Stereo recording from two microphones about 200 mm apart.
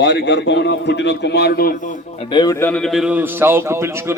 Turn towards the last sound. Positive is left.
turn(degrees=-10)  # may be behind; listen again after turning